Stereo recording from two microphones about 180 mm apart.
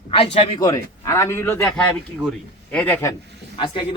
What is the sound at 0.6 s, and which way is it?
A man's voice, 15° left (ahead or behind).